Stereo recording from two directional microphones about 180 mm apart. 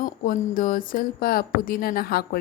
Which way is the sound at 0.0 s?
50° left (ahead or behind).